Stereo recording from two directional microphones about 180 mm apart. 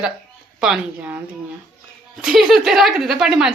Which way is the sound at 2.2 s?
Centre (ahead or behind).